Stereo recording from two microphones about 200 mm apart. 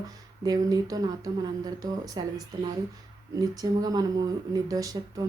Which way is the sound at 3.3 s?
20° right (ahead or behind).